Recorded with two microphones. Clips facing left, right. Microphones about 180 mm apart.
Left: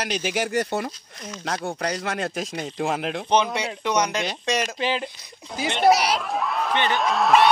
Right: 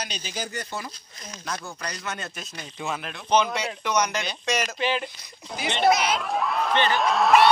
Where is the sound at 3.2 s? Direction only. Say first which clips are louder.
Even; 20° left (ahead or behind).